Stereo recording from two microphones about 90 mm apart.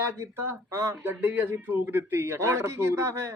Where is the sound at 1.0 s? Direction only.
20° right (ahead or behind).